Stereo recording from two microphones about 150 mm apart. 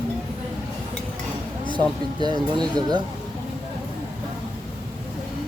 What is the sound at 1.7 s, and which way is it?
Speech, 30° right (ahead or behind).